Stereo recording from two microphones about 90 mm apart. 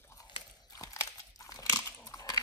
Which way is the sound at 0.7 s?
45° left (ahead or behind).